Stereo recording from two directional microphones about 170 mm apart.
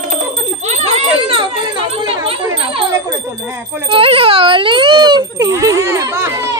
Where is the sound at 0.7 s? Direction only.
40° right (ahead or behind).